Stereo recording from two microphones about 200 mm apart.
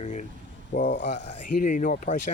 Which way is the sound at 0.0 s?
35° left (ahead or behind).